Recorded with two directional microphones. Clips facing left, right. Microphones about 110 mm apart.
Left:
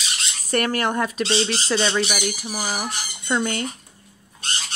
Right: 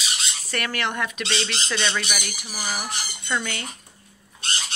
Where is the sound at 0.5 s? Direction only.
45° left (ahead or behind); by 2.8 s 25° left (ahead or behind).